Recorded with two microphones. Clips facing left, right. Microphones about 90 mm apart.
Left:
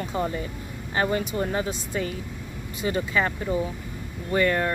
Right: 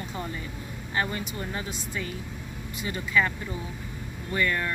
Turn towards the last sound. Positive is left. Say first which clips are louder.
# left 5 dB
turn(degrees=35)  # may be behind; listen again after turning